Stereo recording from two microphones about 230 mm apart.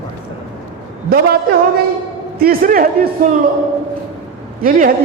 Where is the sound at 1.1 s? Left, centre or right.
Right.